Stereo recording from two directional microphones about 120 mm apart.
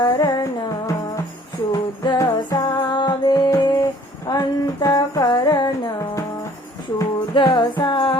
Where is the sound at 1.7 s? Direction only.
30° left (ahead or behind).